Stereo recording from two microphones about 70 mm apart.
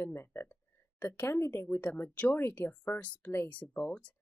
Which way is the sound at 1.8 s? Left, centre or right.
Left.